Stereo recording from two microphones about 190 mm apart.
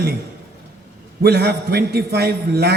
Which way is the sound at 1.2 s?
60° right (ahead or behind).